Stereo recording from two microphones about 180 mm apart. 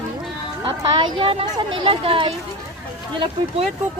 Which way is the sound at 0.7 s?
30° right (ahead or behind).